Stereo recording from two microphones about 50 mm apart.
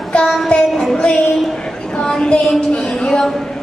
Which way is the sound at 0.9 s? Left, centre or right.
Centre.